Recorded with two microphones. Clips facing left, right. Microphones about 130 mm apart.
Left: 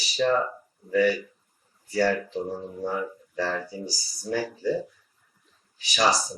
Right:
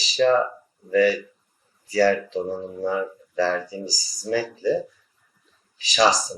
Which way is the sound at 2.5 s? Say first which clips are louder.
Right 4 dB; 35° right (ahead or behind).